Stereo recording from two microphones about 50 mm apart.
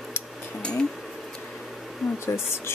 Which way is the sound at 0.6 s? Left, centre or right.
Centre.